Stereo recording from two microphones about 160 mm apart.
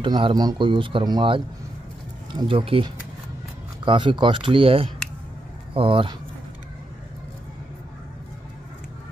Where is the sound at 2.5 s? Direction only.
35° right (ahead or behind).